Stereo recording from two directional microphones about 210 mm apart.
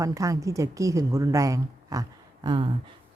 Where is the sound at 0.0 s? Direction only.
15° right (ahead or behind).